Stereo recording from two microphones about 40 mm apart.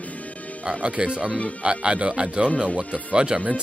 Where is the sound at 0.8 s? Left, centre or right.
Right.